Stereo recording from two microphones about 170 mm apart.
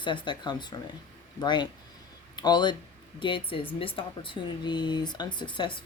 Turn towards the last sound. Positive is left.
turn(degrees=25)  # may be behind; listen again after turning